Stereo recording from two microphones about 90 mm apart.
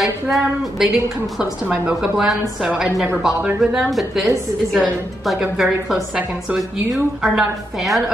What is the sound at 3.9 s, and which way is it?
A woman's voice, centre (ahead or behind).